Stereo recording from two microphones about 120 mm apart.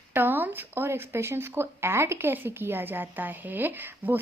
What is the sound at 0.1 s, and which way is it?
Speech, 15° right (ahead or behind).